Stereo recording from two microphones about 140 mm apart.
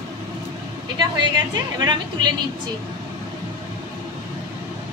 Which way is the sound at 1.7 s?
30° right (ahead or behind).